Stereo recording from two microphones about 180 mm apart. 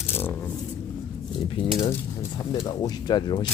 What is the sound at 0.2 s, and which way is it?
Shuffling cards, 10° left (ahead or behind).